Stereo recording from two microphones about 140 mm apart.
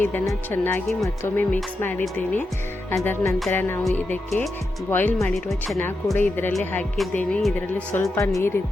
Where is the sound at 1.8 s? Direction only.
15° left (ahead or behind).